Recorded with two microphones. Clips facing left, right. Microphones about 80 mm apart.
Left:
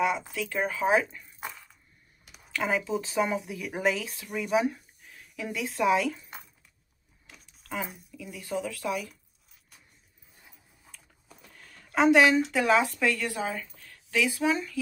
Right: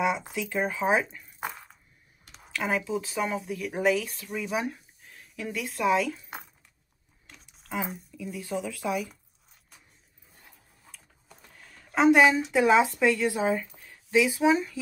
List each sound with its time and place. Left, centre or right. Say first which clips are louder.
0.0 s speech: even; centre
1.4 s a sound: right 5 dB; right
2.2 s speech: even; centre
7.2 s speech: even; centre
10.8 s a sound: right 1 dB; centre
12.4 s speech: right 3 dB; centre